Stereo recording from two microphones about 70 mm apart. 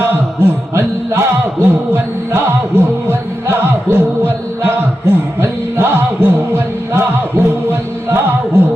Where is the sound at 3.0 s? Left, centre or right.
Right.